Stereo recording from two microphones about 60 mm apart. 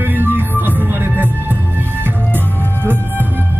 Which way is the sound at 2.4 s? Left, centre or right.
Left.